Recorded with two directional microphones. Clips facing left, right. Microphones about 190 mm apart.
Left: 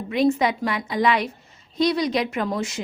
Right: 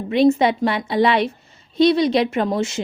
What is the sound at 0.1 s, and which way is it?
Speech, 30° right (ahead or behind).